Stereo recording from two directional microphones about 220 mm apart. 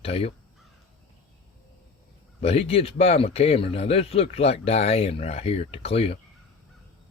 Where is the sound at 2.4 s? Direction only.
25° left (ahead or behind).